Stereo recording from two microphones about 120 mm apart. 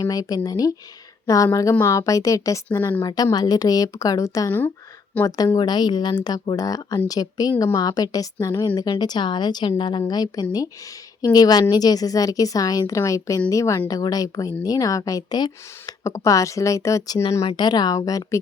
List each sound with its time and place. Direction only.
0.0 s a woman's voice: 30° left (ahead or behind)
1.8 s a woman's voice: 30° left (ahead or behind)
5.5 s a woman's voice: 35° left (ahead or behind)
17.6 s a woman's voice: 35° left (ahead or behind)